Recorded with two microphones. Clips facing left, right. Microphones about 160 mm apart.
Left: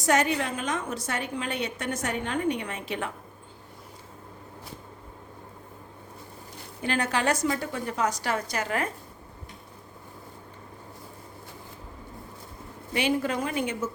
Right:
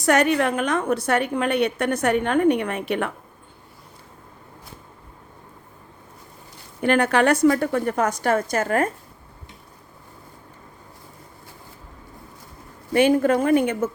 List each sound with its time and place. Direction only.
0.0 s a woman's voice: 65° right (ahead or behind)
6.8 s a woman's voice: 60° right (ahead or behind)
12.9 s speech: 50° right (ahead or behind)